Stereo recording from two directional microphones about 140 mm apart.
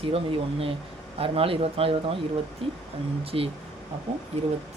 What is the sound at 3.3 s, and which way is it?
Speech, 40° right (ahead or behind).